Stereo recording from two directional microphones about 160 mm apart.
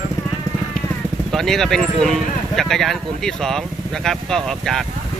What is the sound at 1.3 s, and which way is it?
Speech, centre (ahead or behind).